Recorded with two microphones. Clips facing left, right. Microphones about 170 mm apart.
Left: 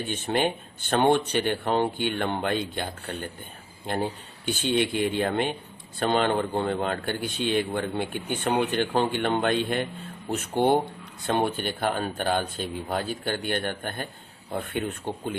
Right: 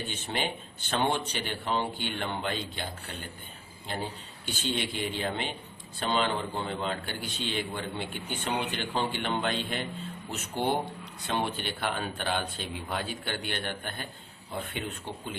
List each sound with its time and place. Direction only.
0.1 s a man's voice: 55° left (ahead or behind)